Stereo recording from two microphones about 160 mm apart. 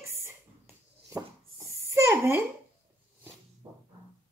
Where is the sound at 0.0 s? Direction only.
15° right (ahead or behind).